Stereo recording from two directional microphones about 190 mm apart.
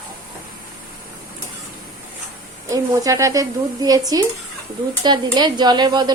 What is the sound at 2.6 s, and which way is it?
A woman's voice, 15° right (ahead or behind).